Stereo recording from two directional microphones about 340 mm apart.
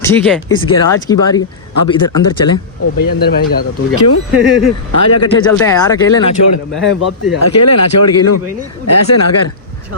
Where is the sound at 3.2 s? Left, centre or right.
Left.